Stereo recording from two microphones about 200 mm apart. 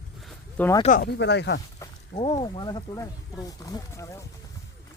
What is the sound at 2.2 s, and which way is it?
Speech, 30° left (ahead or behind).